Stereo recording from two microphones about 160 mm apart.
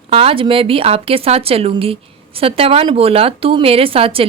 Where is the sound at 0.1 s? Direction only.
35° right (ahead or behind).